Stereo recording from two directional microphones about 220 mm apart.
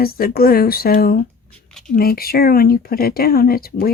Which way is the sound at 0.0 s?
45° left (ahead or behind).